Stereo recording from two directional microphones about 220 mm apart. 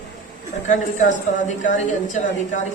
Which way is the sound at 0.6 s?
35° left (ahead or behind).